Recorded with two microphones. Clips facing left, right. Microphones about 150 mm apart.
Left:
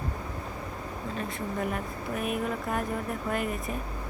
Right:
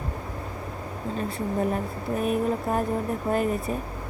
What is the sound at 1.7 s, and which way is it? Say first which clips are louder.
Speech: right 5 dB; 35° right (ahead or behind).